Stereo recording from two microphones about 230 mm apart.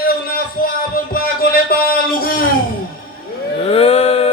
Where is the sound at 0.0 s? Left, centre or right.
Left.